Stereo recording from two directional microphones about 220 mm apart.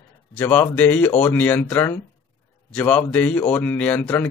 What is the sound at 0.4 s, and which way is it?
Speech, 10° left (ahead or behind).